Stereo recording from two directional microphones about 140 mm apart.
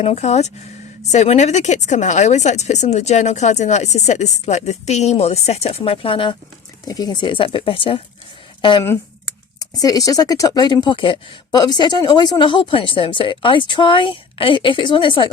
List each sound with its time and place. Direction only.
0.0 s speech: 50° left (ahead or behind)
6.8 s speech: 25° left (ahead or behind)
9.8 s speech: 25° left (ahead or behind)